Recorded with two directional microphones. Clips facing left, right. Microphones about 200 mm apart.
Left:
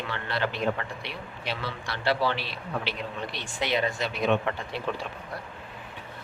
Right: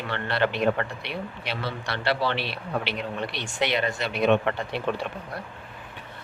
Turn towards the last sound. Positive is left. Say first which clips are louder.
# right 4 dB
turn(degrees=-65)  # may be behind; listen again after turning